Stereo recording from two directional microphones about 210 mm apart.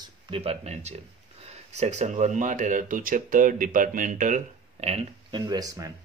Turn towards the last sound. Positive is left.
turn(degrees=-15)  # may be behind; listen again after turning